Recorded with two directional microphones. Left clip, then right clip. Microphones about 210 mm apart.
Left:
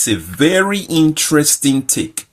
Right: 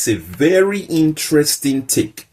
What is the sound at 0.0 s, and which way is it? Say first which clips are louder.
Speech: left 1 dB; 50° left (ahead or behind).